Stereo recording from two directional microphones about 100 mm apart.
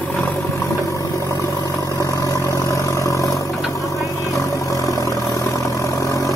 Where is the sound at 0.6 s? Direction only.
30° left (ahead or behind).